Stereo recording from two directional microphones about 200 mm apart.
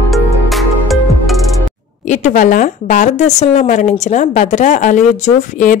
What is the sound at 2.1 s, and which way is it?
A woman's voice, 40° left (ahead or behind).